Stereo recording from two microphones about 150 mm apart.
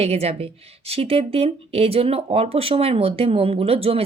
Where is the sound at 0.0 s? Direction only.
45° right (ahead or behind).